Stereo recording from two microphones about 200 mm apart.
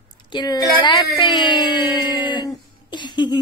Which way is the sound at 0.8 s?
25° left (ahead or behind).